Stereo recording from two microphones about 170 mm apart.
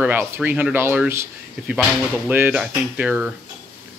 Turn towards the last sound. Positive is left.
turn(degrees=-5)  # may be behind; listen again after turning